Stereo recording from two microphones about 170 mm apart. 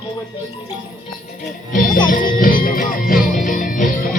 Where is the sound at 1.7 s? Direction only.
50° left (ahead or behind).